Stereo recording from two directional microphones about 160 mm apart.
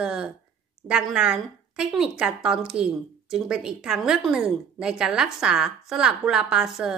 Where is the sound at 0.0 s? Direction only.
5° right (ahead or behind).